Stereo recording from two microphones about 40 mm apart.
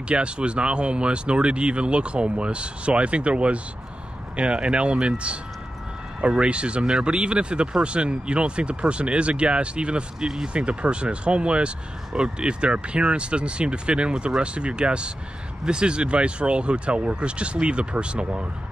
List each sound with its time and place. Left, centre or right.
0.1 s speech: right